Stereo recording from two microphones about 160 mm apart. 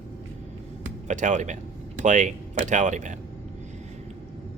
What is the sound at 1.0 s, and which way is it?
Speech, 50° right (ahead or behind).